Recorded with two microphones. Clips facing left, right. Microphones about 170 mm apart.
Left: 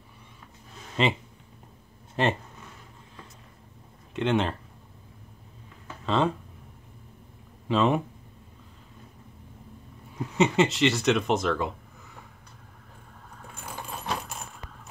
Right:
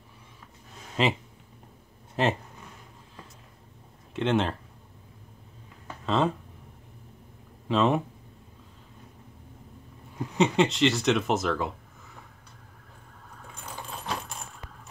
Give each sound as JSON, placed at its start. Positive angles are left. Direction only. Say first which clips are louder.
{"t": 1.0, "sound": "speech", "louder": "even", "side_deg": 0}
{"t": 2.2, "sound": "speech", "louder": "even", "side_deg": 0}
{"t": 4.1, "sound": "speech", "louder": "even", "side_deg": 0}
{"t": 6.0, "sound": "speech", "louder": "even", "side_deg": 0}
{"t": 7.6, "sound": "speech", "louder": "even", "side_deg": 0}
{"t": 10.3, "sound": "speech", "louder": "left 1 dB", "side_deg": 0}